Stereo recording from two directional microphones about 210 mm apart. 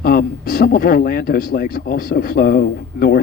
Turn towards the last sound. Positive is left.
turn(degrees=45)  # may be behind; listen again after turning